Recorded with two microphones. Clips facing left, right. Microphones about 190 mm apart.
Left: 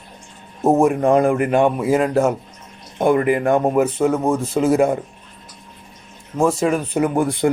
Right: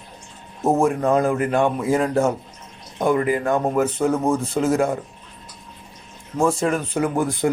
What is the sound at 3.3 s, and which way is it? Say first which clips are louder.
Speech: left 4 dB; 25° left (ahead or behind).